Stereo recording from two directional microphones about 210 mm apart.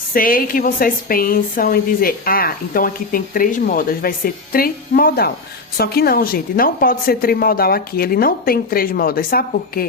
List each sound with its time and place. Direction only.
0.1 s a woman's voice: 40° left (ahead or behind)